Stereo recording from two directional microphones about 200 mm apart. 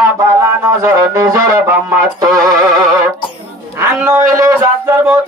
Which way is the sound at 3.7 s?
15° right (ahead or behind).